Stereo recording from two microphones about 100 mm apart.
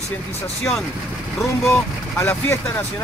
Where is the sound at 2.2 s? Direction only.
20° left (ahead or behind).